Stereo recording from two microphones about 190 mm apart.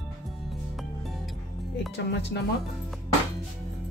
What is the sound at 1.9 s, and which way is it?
Speech, 65° left (ahead or behind).